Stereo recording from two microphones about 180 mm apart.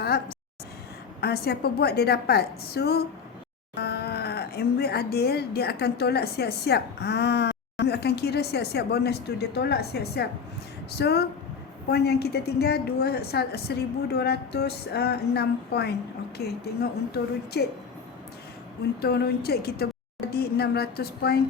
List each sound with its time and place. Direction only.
0.0 s a sound: 60° left (ahead or behind)
1.2 s speech: 60° left (ahead or behind)
19.0 s speech: 60° left (ahead or behind)